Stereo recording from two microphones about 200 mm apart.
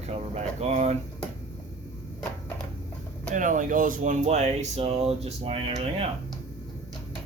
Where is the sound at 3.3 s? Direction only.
40° right (ahead or behind).